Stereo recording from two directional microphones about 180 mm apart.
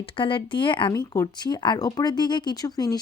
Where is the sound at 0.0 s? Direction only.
30° left (ahead or behind).